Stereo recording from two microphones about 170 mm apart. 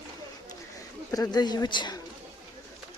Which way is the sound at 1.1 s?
20° left (ahead or behind).